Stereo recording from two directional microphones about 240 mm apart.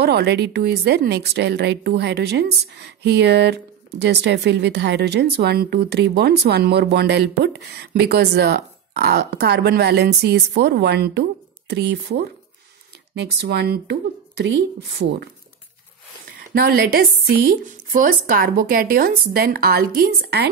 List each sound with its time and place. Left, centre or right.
0.0 s a woman's voice: right
16.5 s a woman's voice: right